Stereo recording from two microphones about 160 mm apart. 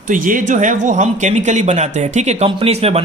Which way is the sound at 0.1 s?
55° right (ahead or behind).